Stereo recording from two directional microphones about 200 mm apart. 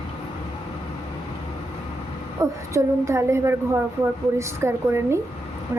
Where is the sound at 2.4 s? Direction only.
15° right (ahead or behind).